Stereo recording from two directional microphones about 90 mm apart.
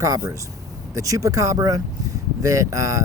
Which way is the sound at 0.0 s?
35° right (ahead or behind).